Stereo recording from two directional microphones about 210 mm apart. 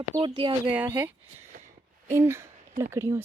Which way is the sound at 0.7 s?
10° right (ahead or behind).